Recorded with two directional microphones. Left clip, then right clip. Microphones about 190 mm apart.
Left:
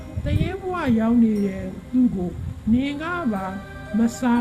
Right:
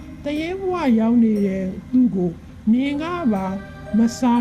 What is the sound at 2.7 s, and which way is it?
A woman's voice, 25° right (ahead or behind).